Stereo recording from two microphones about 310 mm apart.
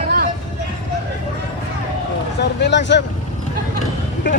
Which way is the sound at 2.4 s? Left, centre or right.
Left.